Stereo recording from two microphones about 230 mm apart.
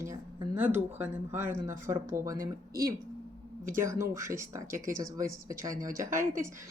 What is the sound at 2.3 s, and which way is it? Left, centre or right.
Speech, right.